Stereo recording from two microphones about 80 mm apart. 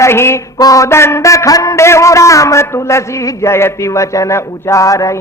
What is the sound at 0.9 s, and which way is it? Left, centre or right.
Speech, left.